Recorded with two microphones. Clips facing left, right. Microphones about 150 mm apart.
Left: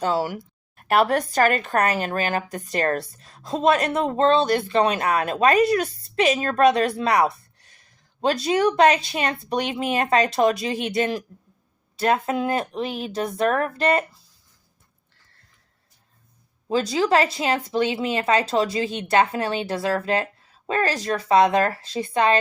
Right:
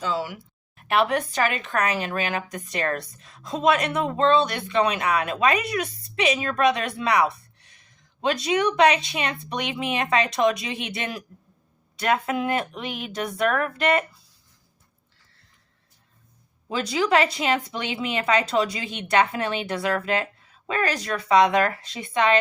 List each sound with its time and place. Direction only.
0.0 s speech: 40° left (ahead or behind)
16.6 s speech: 30° left (ahead or behind)